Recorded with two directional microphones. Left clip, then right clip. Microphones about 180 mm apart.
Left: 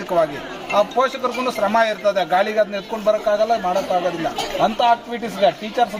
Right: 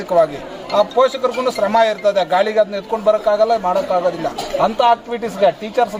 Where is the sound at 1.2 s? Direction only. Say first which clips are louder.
Right 3 dB; 35° right (ahead or behind).